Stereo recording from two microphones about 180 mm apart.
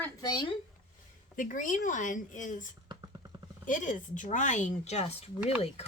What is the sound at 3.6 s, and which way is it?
Speech, 45° left (ahead or behind).